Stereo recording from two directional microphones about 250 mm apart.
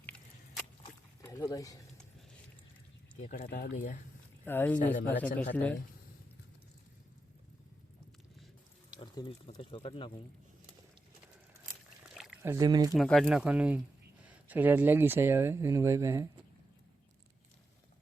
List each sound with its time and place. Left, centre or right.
0.0 s a sound: centre
3.2 s speech: left
4.4 s speech: centre
9.0 s speech: centre
12.1 s a sound: centre
13.0 s speech: centre